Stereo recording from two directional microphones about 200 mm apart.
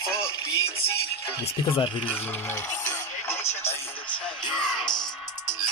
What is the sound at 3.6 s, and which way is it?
Radio, 10° left (ahead or behind).